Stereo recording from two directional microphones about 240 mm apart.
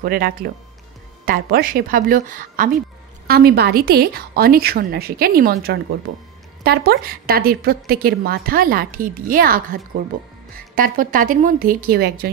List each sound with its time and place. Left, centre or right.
0.0 s a woman's voice: right